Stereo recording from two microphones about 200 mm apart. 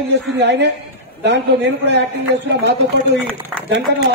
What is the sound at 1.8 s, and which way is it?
A man's voice, 60° right (ahead or behind).